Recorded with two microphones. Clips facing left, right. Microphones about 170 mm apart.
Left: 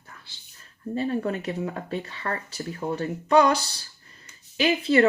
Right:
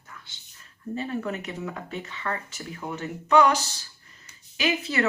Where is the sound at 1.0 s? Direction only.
35° left (ahead or behind).